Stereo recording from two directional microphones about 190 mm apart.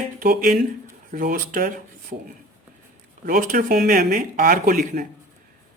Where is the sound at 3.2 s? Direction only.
50° right (ahead or behind).